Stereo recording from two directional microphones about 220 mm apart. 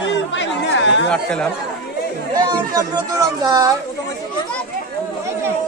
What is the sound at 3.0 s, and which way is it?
Speech, 15° right (ahead or behind).